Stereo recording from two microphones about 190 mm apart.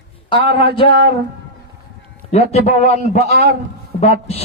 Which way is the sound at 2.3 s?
35° left (ahead or behind).